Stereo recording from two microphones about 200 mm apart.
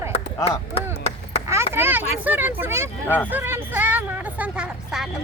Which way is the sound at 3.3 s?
10° right (ahead or behind).